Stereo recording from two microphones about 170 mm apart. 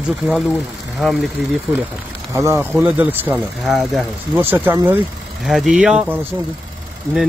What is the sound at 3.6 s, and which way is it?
Speech, centre (ahead or behind).